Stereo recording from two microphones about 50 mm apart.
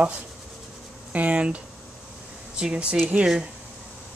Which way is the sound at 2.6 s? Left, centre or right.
Right.